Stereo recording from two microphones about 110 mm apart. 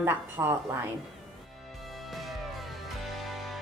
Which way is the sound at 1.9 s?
Centre (ahead or behind).